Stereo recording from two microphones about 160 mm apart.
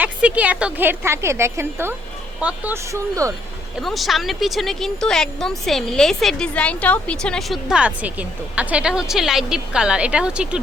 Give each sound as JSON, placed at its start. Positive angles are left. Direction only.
{"t": 0.0, "sound": "a woman's voice", "side_deg": -10}
{"t": 3.8, "sound": "speech", "side_deg": 0}